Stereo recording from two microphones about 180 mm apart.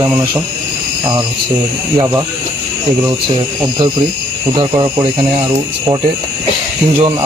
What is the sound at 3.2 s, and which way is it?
Speech, 25° right (ahead or behind).